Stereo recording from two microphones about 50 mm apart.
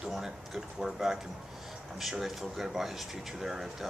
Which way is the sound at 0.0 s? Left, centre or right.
Centre.